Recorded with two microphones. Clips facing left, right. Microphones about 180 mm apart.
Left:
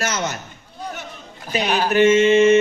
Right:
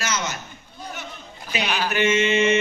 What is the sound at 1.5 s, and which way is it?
Speech, 45° left (ahead or behind).